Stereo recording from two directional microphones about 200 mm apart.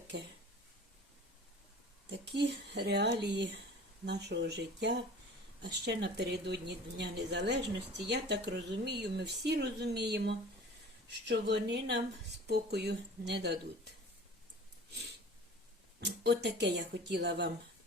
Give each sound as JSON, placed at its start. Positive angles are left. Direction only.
{"t": 2.0, "sound": "speech", "side_deg": -60}
{"t": 16.0, "sound": "speech", "side_deg": -60}